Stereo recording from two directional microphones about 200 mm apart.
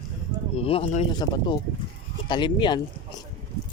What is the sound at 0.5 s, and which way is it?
Speech, 30° left (ahead or behind).